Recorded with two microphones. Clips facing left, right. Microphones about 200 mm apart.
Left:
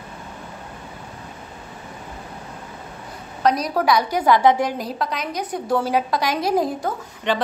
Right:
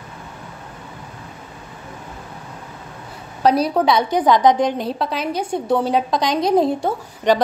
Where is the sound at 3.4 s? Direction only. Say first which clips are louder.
Right 3 dB; 30° right (ahead or behind).